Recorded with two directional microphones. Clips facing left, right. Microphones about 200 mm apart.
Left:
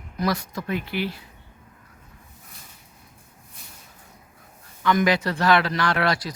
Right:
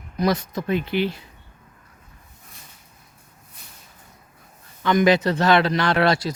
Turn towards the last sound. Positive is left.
turn(degrees=-25)  # may be behind; listen again after turning